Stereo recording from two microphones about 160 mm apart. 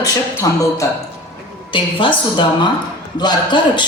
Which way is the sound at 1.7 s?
30° left (ahead or behind).